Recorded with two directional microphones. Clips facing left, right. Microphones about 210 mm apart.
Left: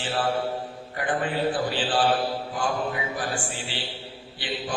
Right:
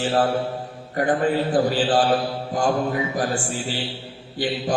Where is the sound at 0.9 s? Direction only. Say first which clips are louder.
Right 7 dB; 40° right (ahead or behind).